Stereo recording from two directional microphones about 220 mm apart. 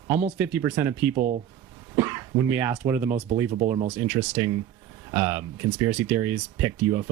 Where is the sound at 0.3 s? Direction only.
10° right (ahead or behind).